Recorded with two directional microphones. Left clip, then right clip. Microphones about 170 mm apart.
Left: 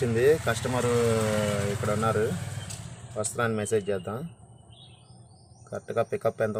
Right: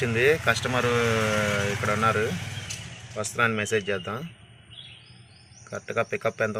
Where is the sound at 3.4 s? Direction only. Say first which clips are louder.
Right 3 dB; 20° left (ahead or behind).